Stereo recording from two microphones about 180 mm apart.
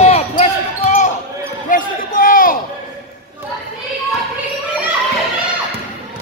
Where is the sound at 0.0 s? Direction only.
35° left (ahead or behind).